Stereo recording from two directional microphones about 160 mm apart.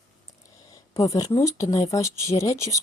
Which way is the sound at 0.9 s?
20° left (ahead or behind).